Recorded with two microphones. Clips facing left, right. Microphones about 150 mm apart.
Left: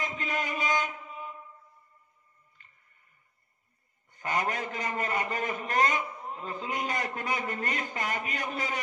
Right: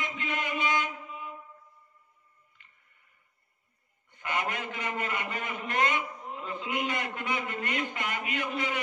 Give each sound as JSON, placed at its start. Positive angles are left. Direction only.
{"t": 0.0, "sound": "a sound", "side_deg": 40}
{"t": 2.6, "sound": "music", "side_deg": 40}
{"t": 4.1, "sound": "a man's voice", "side_deg": 40}